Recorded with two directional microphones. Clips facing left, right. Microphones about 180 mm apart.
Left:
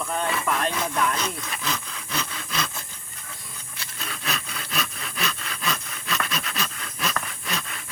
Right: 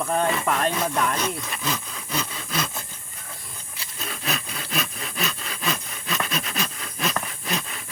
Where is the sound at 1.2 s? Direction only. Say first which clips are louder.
Right 3 dB; 5° right (ahead or behind).